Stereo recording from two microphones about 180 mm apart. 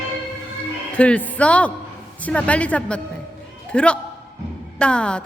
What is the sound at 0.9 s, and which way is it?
A man's voice, 5° left (ahead or behind).